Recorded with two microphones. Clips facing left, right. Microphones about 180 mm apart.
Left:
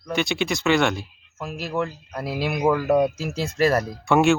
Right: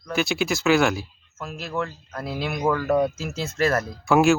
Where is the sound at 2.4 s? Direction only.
5° left (ahead or behind).